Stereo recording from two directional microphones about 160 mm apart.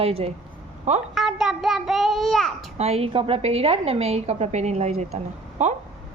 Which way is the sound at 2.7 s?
40° right (ahead or behind).